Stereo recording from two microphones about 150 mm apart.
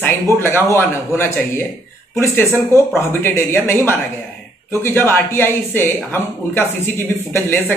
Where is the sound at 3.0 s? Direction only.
15° left (ahead or behind).